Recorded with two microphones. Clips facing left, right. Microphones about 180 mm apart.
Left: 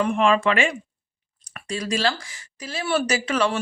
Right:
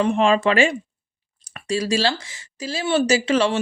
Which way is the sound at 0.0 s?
30° right (ahead or behind).